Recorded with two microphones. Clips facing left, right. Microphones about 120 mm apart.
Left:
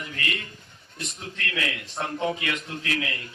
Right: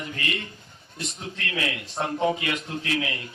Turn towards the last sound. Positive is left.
turn(degrees=-35)  # may be behind; listen again after turning